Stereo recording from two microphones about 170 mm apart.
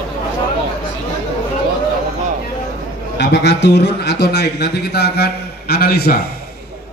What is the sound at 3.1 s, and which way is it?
A man's voice, 85° left.